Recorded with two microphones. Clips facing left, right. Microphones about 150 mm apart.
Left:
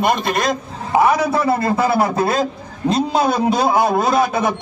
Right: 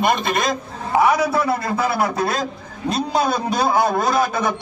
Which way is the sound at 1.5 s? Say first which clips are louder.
Left 4 dB; 25° left (ahead or behind).